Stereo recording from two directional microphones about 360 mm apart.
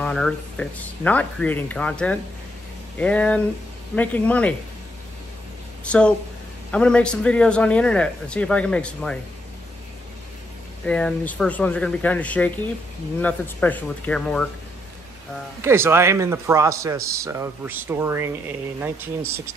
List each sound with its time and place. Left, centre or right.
0.0 s speech: centre
5.9 s speech: centre
10.9 s speech: centre
15.6 s speech: centre